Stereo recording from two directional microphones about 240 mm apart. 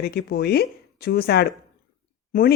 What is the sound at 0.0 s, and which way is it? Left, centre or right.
Speech, left.